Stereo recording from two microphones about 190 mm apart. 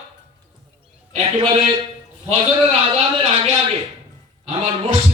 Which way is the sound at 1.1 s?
30° right (ahead or behind).